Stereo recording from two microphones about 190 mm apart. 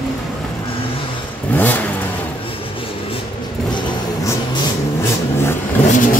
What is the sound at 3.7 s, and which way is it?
Vehicle, 25° left (ahead or behind).